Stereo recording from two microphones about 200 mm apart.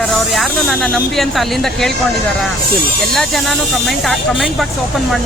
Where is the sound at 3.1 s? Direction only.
Centre (ahead or behind).